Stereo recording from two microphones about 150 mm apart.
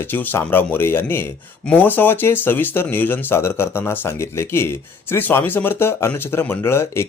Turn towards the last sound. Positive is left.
turn(degrees=15)  # may be behind; listen again after turning